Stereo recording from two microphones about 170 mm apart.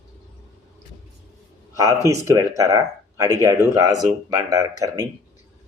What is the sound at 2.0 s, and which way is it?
Speech, 20° right (ahead or behind).